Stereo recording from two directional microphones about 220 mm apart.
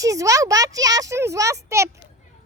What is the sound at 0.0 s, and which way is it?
Speech, 15° right (ahead or behind).